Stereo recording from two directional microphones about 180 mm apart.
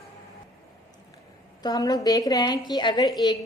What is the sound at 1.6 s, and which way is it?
A woman's voice, 20° left (ahead or behind).